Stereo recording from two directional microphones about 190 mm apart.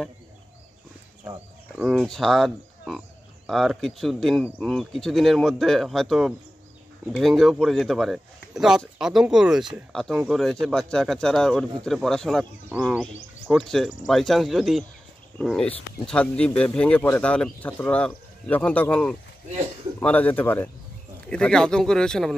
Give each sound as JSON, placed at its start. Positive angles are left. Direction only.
{"t": 1.8, "sound": "speech", "side_deg": -5}